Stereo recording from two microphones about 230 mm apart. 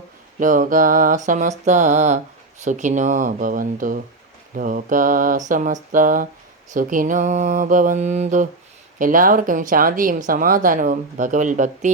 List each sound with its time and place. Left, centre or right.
0.3 s speech: right